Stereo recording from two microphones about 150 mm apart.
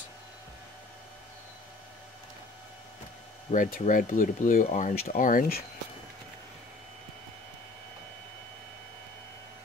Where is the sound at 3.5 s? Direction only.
60° left (ahead or behind).